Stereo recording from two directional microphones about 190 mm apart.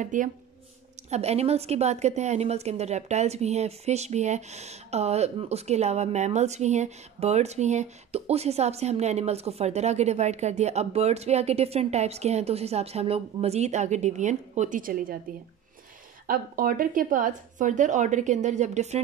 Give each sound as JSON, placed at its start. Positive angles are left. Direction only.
{"t": 0.0, "sound": "a woman's voice", "side_deg": -40}
{"t": 16.3, "sound": "a woman's voice", "side_deg": -50}